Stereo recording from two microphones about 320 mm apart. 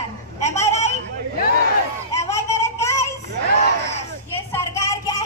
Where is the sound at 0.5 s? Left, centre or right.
Left.